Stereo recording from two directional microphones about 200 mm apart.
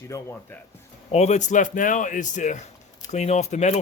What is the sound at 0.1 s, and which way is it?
Speech, 15° left (ahead or behind).